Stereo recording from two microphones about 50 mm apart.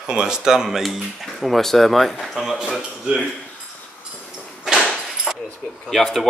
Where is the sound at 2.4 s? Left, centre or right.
Centre.